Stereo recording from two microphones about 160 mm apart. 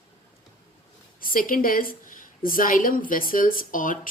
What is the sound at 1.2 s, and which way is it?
A woman's voice, 60° left (ahead or behind).